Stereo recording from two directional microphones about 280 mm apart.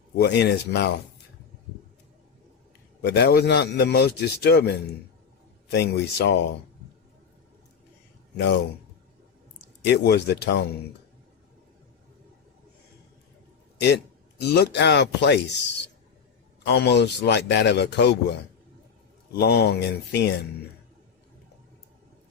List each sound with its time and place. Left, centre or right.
0.2 s a man's voice: left
3.0 s a man's voice: left
9.8 s a man's voice: left
13.8 s speech: left
16.7 s a man's voice: left